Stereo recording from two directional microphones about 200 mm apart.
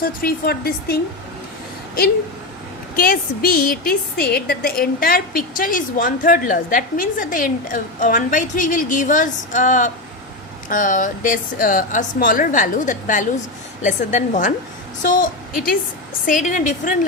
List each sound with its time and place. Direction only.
0.0 s a woman's voice: 50° left (ahead or behind)
2.9 s a woman's voice: 45° left (ahead or behind)